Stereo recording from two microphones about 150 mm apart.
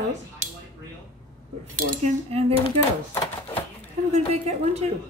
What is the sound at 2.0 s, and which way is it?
Speech, 45° right (ahead or behind).